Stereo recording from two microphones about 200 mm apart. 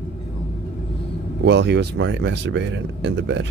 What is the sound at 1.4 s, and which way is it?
Speech, 60° right (ahead or behind).